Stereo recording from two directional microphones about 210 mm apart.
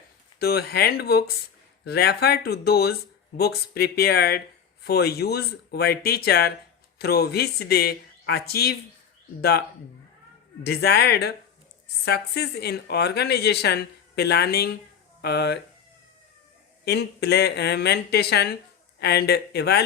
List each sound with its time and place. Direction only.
0.3 s speech: 50° left (ahead or behind)
16.8 s speech: 50° left (ahead or behind)